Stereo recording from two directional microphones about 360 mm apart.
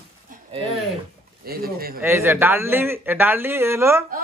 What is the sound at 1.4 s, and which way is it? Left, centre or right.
Speech, right.